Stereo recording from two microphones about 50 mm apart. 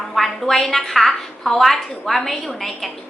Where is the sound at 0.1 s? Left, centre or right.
Centre.